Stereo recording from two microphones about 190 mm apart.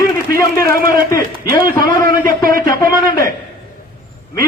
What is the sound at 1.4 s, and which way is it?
A man's voice, 50° right (ahead or behind).